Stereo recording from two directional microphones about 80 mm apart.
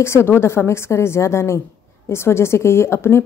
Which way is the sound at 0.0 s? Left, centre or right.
Left.